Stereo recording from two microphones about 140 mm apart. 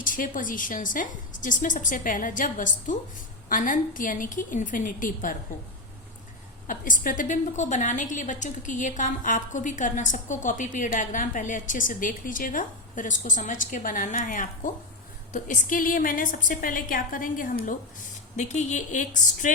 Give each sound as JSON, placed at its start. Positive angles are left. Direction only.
{"t": 0.0, "sound": "a woman's voice", "side_deg": 75}
{"t": 6.7, "sound": "a woman's voice", "side_deg": 70}
{"t": 18.3, "sound": "speech", "side_deg": 60}